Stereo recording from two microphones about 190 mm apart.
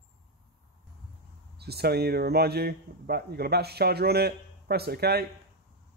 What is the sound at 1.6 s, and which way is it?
Speech, 55° right (ahead or behind).